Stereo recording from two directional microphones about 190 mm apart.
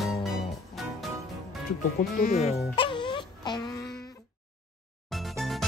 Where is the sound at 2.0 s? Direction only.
40° left (ahead or behind); by 3.6 s 25° left (ahead or behind).